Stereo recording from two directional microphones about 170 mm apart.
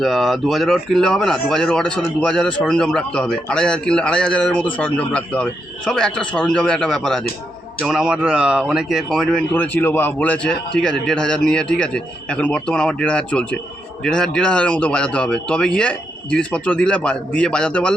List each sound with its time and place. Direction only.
0.0 s speech: centre (ahead or behind)